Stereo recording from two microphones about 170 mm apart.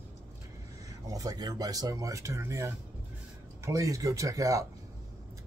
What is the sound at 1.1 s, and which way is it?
Speech, 20° right (ahead or behind).